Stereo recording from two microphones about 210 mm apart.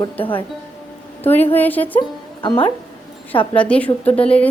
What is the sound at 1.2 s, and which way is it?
Speech, 10° left (ahead or behind).